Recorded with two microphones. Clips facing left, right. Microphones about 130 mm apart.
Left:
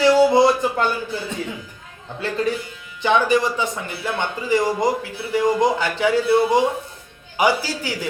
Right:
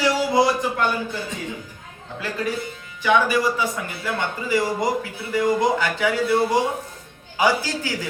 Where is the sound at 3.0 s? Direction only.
25° left (ahead or behind).